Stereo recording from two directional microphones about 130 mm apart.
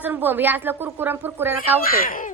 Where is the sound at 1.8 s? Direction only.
90° left.